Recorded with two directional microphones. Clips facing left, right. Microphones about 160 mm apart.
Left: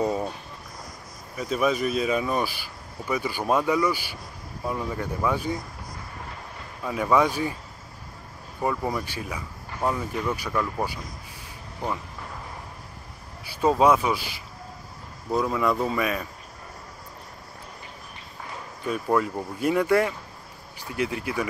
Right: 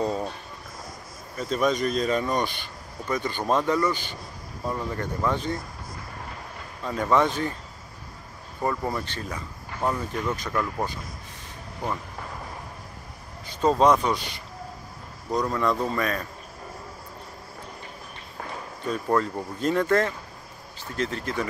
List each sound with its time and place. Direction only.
0.0 s a sound: 10° left (ahead or behind)
1.3 s speech: 5° left (ahead or behind)
6.8 s speech: 10° left (ahead or behind)
8.5 s speech: 10° left (ahead or behind)
13.5 s speech: 10° left (ahead or behind)
18.9 s speech: 10° left (ahead or behind)